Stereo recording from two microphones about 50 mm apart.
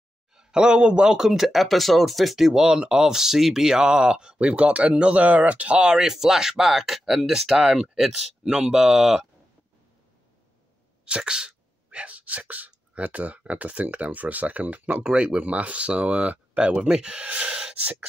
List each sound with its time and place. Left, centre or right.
0.3 s speech: centre
11.1 s speech: centre
15.0 s speech: centre